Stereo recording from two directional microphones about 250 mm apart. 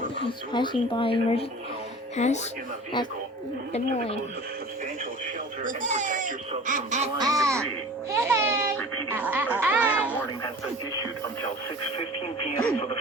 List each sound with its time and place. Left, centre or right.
0.5 s speech: centre
3.7 s speech: left
5.6 s speech: right
7.2 s music: centre
8.1 s a sound: centre
9.1 s music: centre